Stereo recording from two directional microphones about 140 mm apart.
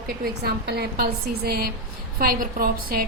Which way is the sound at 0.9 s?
90° right.